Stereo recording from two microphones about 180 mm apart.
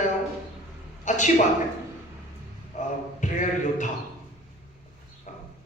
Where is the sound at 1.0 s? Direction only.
45° left (ahead or behind).